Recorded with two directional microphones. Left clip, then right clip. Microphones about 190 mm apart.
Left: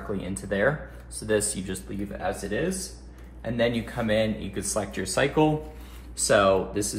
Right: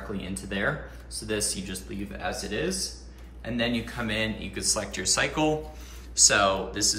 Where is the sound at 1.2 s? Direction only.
25° left (ahead or behind).